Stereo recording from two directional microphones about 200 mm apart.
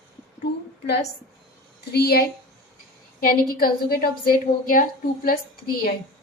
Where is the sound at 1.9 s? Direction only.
50° left (ahead or behind).